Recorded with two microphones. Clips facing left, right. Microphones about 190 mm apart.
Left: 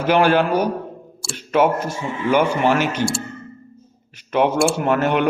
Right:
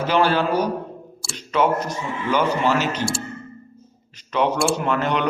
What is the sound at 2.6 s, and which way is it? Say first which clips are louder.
Speech: left 3 dB; 55° left (ahead or behind).